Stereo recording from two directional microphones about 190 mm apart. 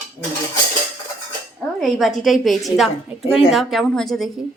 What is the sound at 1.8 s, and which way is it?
A woman's voice, centre (ahead or behind).